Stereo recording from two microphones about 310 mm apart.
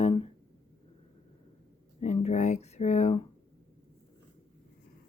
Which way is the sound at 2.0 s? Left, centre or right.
Left.